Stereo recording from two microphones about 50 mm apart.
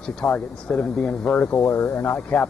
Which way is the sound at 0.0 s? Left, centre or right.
Centre.